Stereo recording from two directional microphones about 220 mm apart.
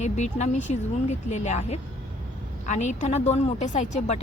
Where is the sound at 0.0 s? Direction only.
30° left (ahead or behind).